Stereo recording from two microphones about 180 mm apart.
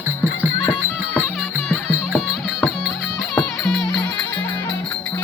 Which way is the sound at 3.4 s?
Centre (ahead or behind).